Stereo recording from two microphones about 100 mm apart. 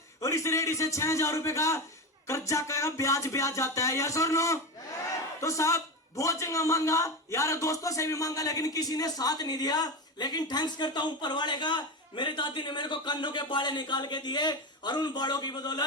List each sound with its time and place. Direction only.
0.2 s music: 30° left (ahead or behind)
5.4 s a man's voice: 30° left (ahead or behind)